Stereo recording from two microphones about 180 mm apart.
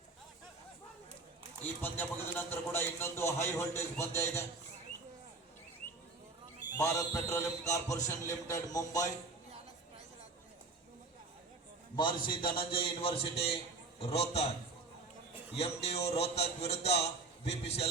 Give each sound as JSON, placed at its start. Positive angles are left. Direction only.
{"t": 1.6, "sound": "a man's voice", "side_deg": 10}
{"t": 6.7, "sound": "a man's voice", "side_deg": 15}
{"t": 11.9, "sound": "a man's voice", "side_deg": 25}
{"t": 15.5, "sound": "a man's voice", "side_deg": 35}